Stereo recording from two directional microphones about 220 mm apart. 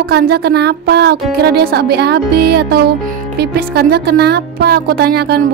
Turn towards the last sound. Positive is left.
turn(degrees=-45)  # may be behind; listen again after turning